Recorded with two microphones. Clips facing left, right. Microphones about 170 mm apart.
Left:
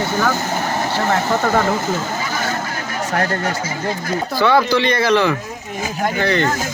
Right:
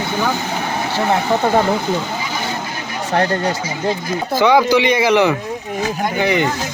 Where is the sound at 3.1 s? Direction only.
20° right (ahead or behind).